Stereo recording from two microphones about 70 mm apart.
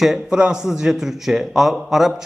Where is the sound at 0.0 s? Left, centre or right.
Centre.